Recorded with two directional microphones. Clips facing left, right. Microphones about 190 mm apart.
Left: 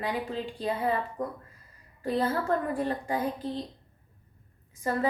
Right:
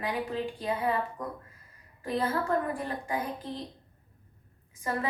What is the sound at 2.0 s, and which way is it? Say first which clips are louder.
Speech: left 2 dB; 35° left (ahead or behind).